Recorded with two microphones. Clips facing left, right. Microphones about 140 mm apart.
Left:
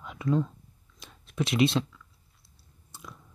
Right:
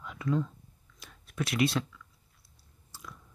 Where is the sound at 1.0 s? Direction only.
25° left (ahead or behind).